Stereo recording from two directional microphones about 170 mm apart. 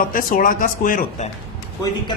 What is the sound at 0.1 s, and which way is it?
Speech, 55° left (ahead or behind).